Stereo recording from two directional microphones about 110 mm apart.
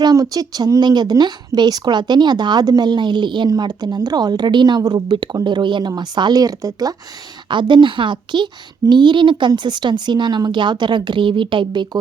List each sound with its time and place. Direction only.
0.0 s speech: 35° right (ahead or behind)
7.5 s speech: 45° right (ahead or behind)